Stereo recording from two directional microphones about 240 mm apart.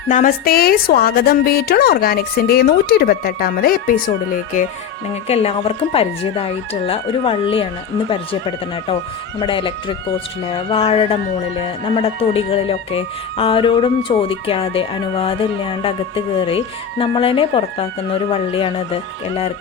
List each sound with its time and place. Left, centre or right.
0.1 s a woman's voice: left
5.3 s speech: left